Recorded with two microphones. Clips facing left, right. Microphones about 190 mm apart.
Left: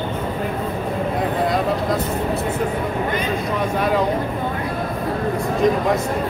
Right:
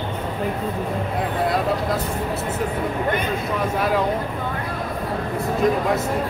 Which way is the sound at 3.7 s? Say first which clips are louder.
Left 2 dB; centre (ahead or behind).